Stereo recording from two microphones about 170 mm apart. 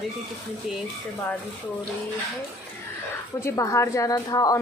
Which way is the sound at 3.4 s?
20° left (ahead or behind).